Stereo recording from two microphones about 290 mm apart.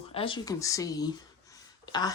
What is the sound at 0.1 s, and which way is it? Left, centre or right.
Speech, centre.